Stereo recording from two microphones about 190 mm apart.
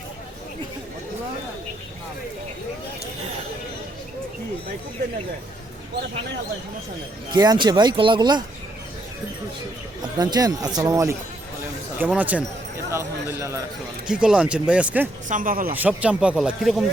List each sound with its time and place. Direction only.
7.3 s speech: 25° right (ahead or behind)
10.2 s speech: 20° right (ahead or behind)
15.3 s speech: 45° right (ahead or behind)
15.7 s speech: 10° right (ahead or behind)